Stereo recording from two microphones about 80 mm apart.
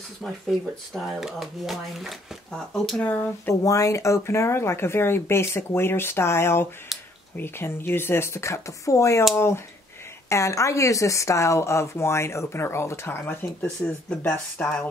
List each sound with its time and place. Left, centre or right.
0.2 s speech: centre
3.0 s speech: centre
3.6 s speech: left
6.9 s a sound: centre
7.3 s speech: left
10.3 s speech: left